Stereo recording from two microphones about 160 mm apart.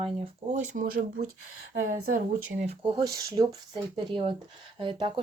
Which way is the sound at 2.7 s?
30° right (ahead or behind).